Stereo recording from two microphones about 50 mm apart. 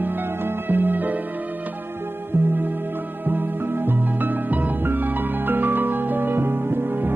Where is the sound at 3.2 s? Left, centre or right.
Right.